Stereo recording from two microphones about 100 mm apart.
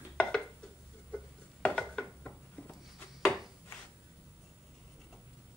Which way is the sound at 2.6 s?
15° left (ahead or behind).